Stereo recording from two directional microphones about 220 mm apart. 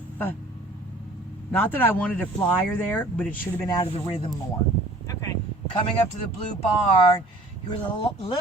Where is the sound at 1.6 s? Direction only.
10° left (ahead or behind).